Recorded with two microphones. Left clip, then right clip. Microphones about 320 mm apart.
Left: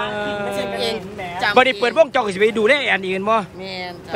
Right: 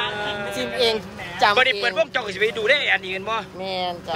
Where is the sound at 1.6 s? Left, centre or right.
Centre.